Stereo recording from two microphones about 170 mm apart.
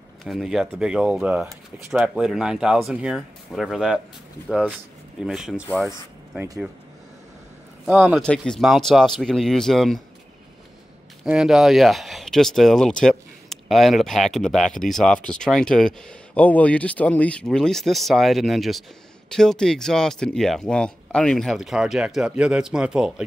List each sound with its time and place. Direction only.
0.2 s speech: centre (ahead or behind)
6.3 s speech: 15° right (ahead or behind)
7.8 s speech: 5° right (ahead or behind)
11.2 s speech: 5° right (ahead or behind)